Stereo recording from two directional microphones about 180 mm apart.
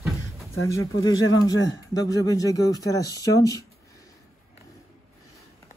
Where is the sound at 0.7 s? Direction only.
90° left.